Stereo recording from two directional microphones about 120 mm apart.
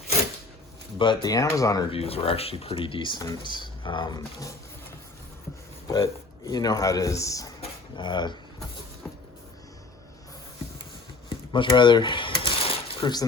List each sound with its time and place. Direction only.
0.9 s speech: 40° left (ahead or behind)
1.9 s speech: 55° left (ahead or behind); by 4.5 s 30° left (ahead or behind)
5.9 s speech: 35° left (ahead or behind)
7.9 s speech: 40° left (ahead or behind)
11.3 s a sound: 45° left (ahead or behind)